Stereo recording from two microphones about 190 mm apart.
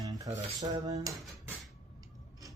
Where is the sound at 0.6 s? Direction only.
20° right (ahead or behind).